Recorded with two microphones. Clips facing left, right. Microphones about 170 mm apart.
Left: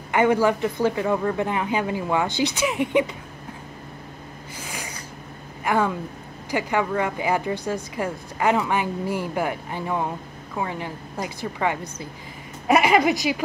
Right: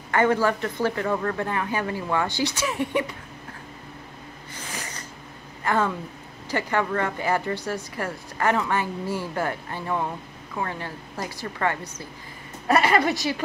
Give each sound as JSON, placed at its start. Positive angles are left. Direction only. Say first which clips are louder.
{"t": 0.1, "sound": "speech", "louder": "left 2 dB", "side_deg": 15}
{"t": 4.6, "sound": "snort", "louder": "even", "side_deg": 10}
{"t": 5.6, "sound": "speech", "louder": "left 2 dB", "side_deg": 15}